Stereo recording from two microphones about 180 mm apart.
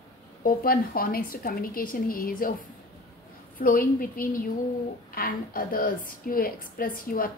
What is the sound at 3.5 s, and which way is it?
A woman's voice, 50° left (ahead or behind).